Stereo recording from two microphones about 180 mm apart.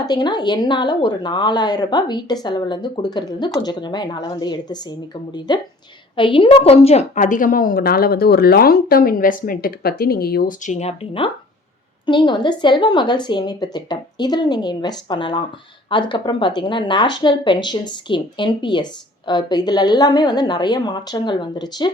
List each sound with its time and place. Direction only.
0.0 s a woman's voice: 25° left (ahead or behind)